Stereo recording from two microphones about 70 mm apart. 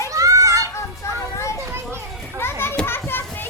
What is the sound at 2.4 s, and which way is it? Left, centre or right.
Children playing, left.